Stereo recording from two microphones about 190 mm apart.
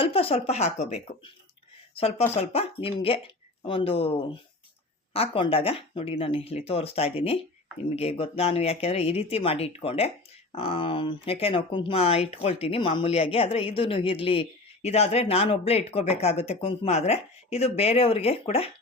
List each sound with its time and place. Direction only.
0.0 s speech: 30° left (ahead or behind)